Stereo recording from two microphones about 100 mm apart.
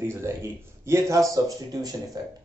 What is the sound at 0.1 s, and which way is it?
Speech, 25° right (ahead or behind).